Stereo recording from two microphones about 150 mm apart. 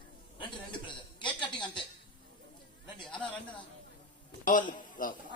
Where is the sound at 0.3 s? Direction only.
30° left (ahead or behind).